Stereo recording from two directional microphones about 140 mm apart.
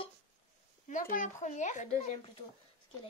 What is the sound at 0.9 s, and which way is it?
Speech, 70° left (ahead or behind).